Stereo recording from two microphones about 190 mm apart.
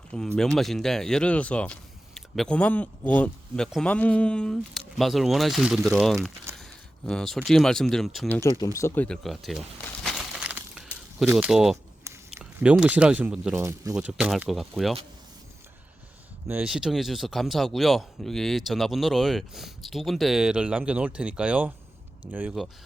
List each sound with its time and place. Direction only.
0.3 s speech: centre (ahead or behind)
8.4 s speech: 15° left (ahead or behind)
9.0 s a sound: centre (ahead or behind)
12.4 s speech: 5° right (ahead or behind)
13.9 s speech: 5° right (ahead or behind)
16.5 s speech: 5° right (ahead or behind)